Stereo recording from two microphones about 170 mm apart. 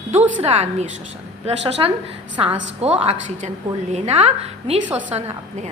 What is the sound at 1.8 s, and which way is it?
A woman's voice, 25° right (ahead or behind).